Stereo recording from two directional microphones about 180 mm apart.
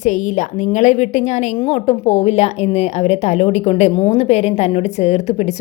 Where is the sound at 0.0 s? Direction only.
40° left (ahead or behind).